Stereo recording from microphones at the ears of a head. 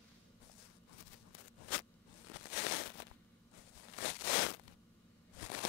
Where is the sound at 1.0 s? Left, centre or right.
Left.